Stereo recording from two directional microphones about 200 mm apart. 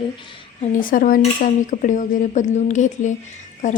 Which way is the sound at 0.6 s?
45° left (ahead or behind).